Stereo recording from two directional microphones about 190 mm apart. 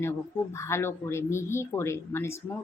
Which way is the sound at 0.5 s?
15° left (ahead or behind).